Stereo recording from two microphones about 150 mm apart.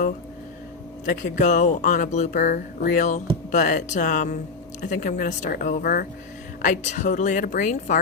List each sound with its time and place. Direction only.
1.0 s speech: 60° left (ahead or behind)
6.6 s speech: 55° left (ahead or behind)